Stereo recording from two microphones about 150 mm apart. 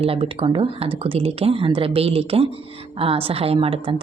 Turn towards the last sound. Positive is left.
turn(degrees=-40)  # may be behind; listen again after turning